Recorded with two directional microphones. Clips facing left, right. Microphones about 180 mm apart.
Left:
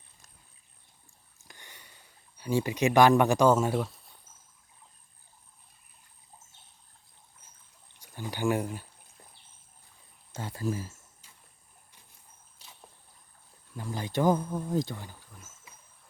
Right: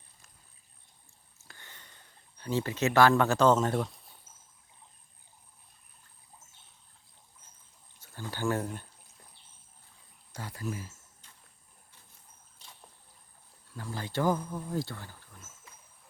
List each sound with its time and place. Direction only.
1.5 s a sound: 15° left (ahead or behind)
7.9 s pour: 15° left (ahead or behind)
10.3 s speech: 25° left (ahead or behind)
13.7 s speech: 15° left (ahead or behind)